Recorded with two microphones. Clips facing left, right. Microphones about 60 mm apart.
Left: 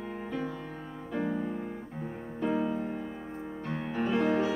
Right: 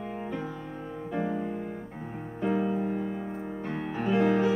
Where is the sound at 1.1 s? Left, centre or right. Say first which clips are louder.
Right 1 dB; centre.